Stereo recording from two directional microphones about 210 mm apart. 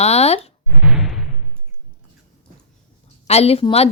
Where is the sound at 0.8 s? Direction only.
5° right (ahead or behind).